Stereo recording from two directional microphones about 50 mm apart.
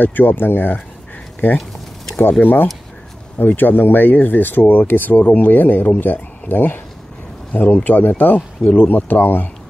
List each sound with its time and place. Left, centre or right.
0.0 s speech: left